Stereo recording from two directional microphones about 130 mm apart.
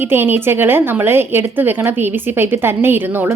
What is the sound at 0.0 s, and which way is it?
A woman's voice, 15° right (ahead or behind).